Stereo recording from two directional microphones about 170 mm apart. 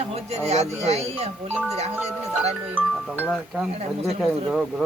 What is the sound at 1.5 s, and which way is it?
Speech, 10° right (ahead or behind).